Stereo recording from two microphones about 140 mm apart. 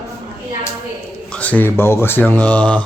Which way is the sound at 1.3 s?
10° left (ahead or behind).